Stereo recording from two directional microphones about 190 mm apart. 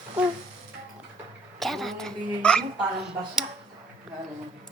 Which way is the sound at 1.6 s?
Centre (ahead or behind).